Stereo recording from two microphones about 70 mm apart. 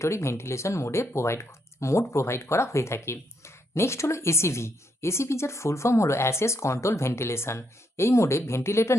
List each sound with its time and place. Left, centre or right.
0.0 s speech: left